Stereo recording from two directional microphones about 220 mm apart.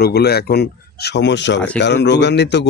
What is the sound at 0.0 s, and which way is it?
A man's voice, 45° left (ahead or behind).